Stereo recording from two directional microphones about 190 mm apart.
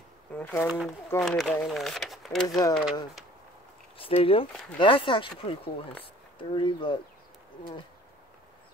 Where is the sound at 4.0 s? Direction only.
30° left (ahead or behind).